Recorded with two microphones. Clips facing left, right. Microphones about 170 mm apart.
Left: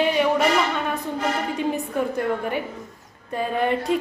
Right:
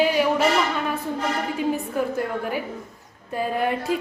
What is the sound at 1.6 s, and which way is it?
A woman's voice, centre (ahead or behind).